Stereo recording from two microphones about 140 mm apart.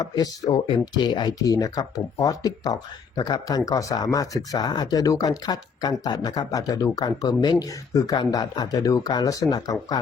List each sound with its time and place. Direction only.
0.0 s speech: 30° left (ahead or behind)